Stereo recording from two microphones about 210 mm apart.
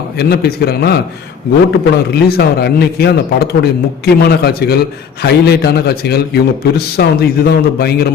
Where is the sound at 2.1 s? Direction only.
50° left (ahead or behind).